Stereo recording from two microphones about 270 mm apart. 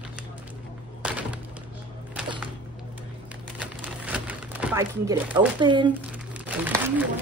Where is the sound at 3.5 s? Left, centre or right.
Centre.